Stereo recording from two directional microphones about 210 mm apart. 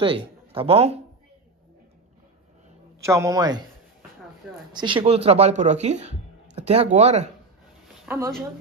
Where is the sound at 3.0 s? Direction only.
15° right (ahead or behind).